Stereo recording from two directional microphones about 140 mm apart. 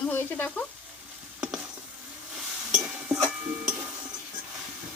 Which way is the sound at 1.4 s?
5° right (ahead or behind).